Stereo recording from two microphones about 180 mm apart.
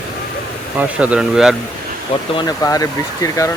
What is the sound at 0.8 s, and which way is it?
Speech, 5° right (ahead or behind).